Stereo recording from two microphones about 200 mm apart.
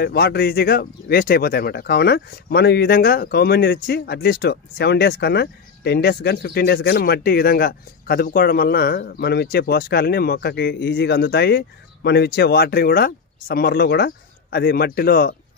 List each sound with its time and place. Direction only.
0.0 s speech: 50° left (ahead or behind)